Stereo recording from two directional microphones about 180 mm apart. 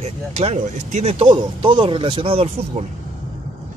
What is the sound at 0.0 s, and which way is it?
Speech, 40° right (ahead or behind).